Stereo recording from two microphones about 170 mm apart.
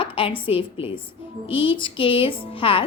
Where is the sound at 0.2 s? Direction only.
30° left (ahead or behind).